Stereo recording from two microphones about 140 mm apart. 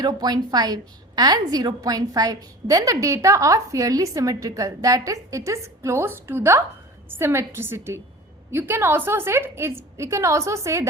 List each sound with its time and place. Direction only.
0.0 s a woman's voice: 30° right (ahead or behind)